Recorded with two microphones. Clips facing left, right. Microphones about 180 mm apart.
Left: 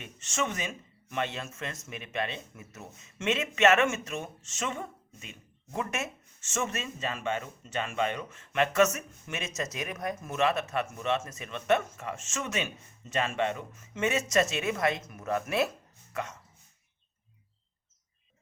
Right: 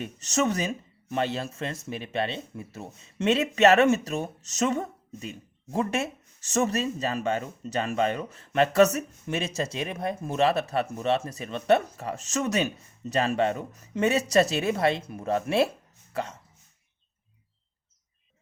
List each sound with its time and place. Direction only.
0.0 s speech: 40° right (ahead or behind)